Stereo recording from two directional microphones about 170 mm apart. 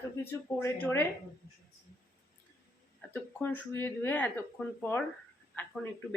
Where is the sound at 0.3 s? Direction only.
15° left (ahead or behind).